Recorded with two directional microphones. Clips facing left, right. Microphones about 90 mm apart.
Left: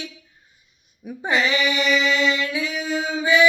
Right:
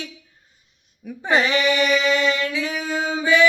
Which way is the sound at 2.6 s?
40° right (ahead or behind).